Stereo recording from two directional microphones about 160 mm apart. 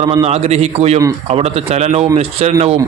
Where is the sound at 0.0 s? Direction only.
35° right (ahead or behind).